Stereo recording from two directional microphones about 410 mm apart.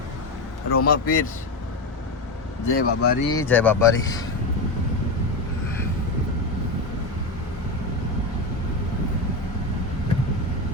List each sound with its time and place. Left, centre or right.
0.7 s a man's voice: left
2.6 s speech: left
3.3 s speech: centre